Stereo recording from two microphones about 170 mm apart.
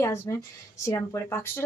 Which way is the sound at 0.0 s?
15° left (ahead or behind).